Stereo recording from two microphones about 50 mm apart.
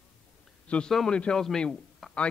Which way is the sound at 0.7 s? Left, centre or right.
Left.